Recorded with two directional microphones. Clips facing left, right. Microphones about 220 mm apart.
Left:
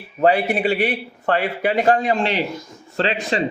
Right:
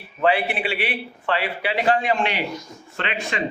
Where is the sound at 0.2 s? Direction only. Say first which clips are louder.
Left 4 dB; 40° left (ahead or behind).